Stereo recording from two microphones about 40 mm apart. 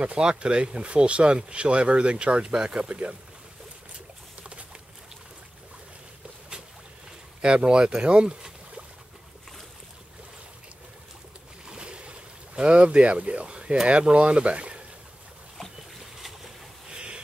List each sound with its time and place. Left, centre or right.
0.0 s speech: right
2.4 s speech: centre
4.4 s a sound: right
7.4 s speech: right
11.6 s boat: right
14.1 s speech: right
16.2 s boat: centre
16.9 s a sound: right